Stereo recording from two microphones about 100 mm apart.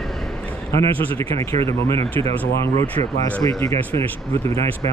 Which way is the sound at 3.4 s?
30° left (ahead or behind).